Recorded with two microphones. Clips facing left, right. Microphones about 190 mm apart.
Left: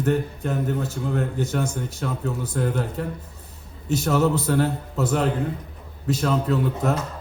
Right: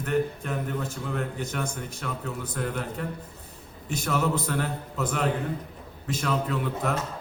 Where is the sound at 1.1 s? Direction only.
35° left (ahead or behind).